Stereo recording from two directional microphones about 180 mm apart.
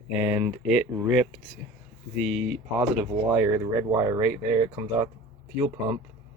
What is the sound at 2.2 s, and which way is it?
Speech, centre (ahead or behind).